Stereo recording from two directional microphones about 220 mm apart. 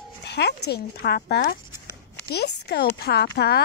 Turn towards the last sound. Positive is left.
turn(degrees=45)  # may be behind; listen again after turning